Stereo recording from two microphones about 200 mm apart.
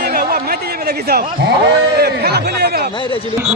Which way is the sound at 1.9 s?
55° right (ahead or behind).